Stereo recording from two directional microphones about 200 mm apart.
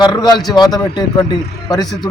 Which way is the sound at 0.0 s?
20° left (ahead or behind).